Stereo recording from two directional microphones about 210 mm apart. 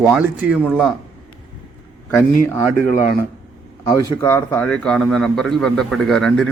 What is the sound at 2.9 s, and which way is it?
Speech, 40° left (ahead or behind).